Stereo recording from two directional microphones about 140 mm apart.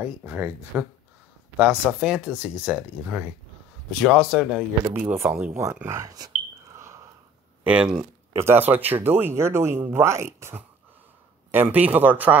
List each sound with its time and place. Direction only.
0.0 s speech: 15° right (ahead or behind)
4.8 s speech: 15° right (ahead or behind)
7.6 s speech: 5° right (ahead or behind)